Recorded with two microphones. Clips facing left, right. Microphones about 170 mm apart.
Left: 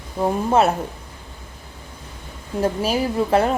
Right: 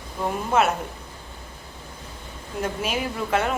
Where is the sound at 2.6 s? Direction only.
35° left (ahead or behind).